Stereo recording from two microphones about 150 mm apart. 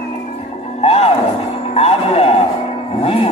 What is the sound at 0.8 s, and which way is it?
Music, 40° left (ahead or behind).